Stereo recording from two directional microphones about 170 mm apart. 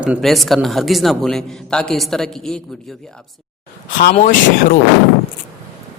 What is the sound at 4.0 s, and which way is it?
Speech, 50° left (ahead or behind).